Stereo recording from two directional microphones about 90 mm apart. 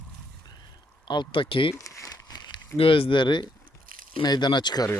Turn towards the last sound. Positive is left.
turn(degrees=50)  # may be behind; listen again after turning